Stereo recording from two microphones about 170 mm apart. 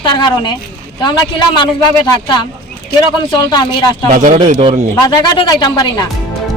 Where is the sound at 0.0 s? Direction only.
30° left (ahead or behind).